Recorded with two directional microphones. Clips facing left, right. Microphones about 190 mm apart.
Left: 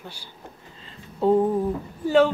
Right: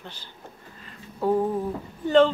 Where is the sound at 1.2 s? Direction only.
25° left (ahead or behind).